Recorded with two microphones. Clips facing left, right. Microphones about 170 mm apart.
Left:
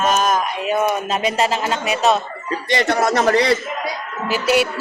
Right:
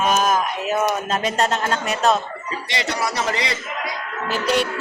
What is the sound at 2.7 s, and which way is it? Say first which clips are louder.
Speech: left 8 dB; 55° left (ahead or behind).